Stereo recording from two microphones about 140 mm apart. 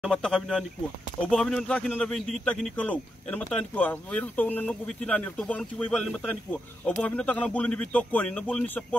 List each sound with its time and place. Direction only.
0.0 s speech: 5° left (ahead or behind)